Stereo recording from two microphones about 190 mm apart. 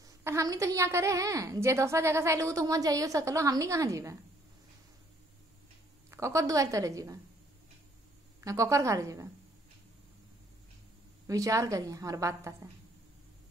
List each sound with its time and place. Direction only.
0.0 s a woman's voice: 15° right (ahead or behind)
6.0 s a woman's voice: 15° right (ahead or behind)
8.5 s a woman's voice: 15° right (ahead or behind)
11.2 s a woman's voice: 15° right (ahead or behind)